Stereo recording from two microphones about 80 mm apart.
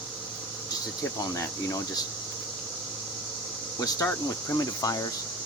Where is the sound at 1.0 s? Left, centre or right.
Left.